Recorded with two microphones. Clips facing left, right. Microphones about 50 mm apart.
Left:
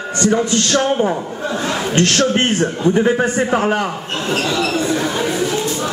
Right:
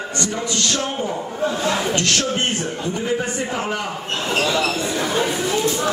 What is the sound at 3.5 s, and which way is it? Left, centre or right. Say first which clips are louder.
Speech: left 8 dB; left.